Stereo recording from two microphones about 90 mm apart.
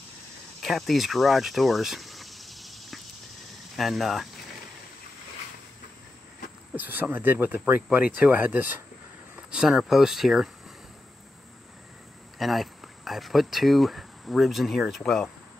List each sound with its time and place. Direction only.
0.6 s a sound: centre (ahead or behind)
3.7 s speech: centre (ahead or behind)
6.7 s speech: 20° right (ahead or behind)
9.5 s speech: 5° right (ahead or behind)
12.4 s speech: centre (ahead or behind)